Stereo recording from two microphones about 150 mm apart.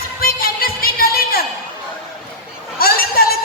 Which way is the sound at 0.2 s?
80° left.